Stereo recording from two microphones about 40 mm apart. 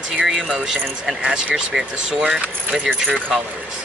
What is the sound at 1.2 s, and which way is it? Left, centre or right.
Speech, right.